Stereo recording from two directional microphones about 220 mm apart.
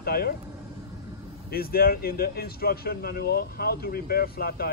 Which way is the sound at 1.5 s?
45° left (ahead or behind).